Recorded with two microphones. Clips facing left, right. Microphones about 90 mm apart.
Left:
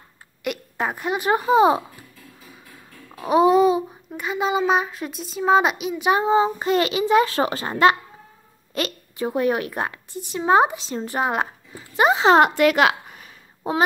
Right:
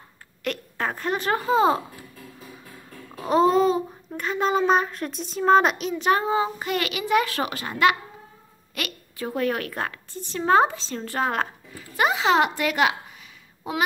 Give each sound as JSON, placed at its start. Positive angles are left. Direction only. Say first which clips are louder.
{"t": 0.4, "sound": "a woman's voice", "louder": "left 2 dB", "side_deg": 10}
{"t": 3.2, "sound": "child singing", "louder": "left 3 dB", "side_deg": 10}
{"t": 12.0, "sound": "a child's voice", "louder": "left 5 dB", "side_deg": 30}
{"t": 12.4, "sound": "a woman's voice", "louder": "left 6 dB", "side_deg": 70}
{"t": 13.7, "sound": "a child's voice", "louder": "left 5 dB", "side_deg": 35}